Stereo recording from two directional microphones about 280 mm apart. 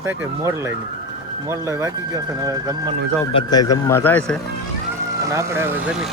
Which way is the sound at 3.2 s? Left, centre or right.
Centre.